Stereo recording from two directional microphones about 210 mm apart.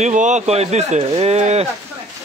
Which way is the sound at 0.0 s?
35° right (ahead or behind).